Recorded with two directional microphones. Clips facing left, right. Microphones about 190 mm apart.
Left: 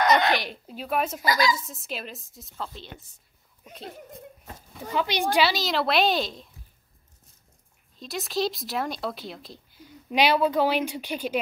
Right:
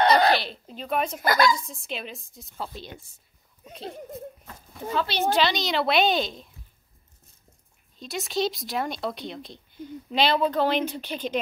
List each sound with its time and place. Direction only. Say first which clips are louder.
0.0 s a sound: right 2 dB; 35° right (ahead or behind)
0.3 s a woman's voice: right 2 dB; 15° left (ahead or behind)
1.2 s a woman's voice: right 5 dB; 55° right (ahead or behind)
1.5 s speech: even; centre (ahead or behind)
2.5 s speech: right 1 dB; 10° right (ahead or behind)
4.9 s speech: even; 15° left (ahead or behind)
8.0 s a woman's voice: right 1 dB; centre (ahead or behind)